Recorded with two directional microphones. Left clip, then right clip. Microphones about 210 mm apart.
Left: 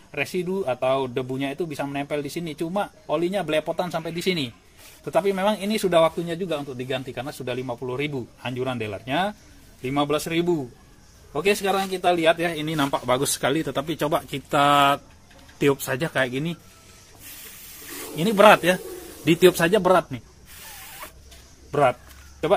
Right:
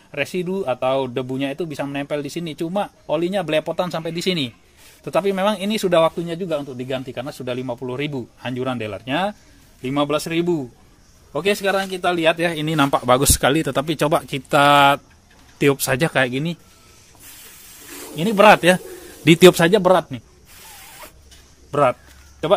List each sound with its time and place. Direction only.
0.1 s speech: 45° right (ahead or behind)
17.3 s a sound: 20° right (ahead or behind)
19.2 s speech: 55° right (ahead or behind)
19.8 s speech: 30° right (ahead or behind)
20.6 s spray: 20° right (ahead or behind)
21.6 s speech: 40° right (ahead or behind)